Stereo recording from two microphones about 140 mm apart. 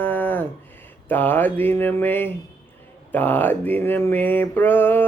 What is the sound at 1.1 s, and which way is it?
Mantra, 15° left (ahead or behind).